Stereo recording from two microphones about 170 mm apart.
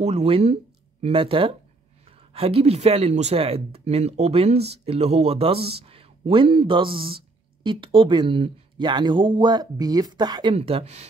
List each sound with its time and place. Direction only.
0.0 s speech: 40° right (ahead or behind); by 10.5 s 25° right (ahead or behind)
10.5 s speech: 35° right (ahead or behind)